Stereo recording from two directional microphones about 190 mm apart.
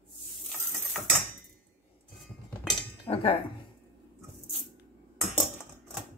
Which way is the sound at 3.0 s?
30° left (ahead or behind).